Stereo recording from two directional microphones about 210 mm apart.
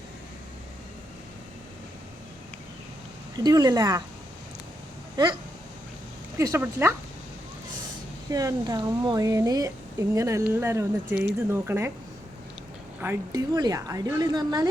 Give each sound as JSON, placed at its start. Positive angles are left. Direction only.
{"t": 3.3, "sound": "speech", "side_deg": -20}
{"t": 6.4, "sound": "speech", "side_deg": -15}
{"t": 8.3, "sound": "speech", "side_deg": -15}
{"t": 13.0, "sound": "speech", "side_deg": -15}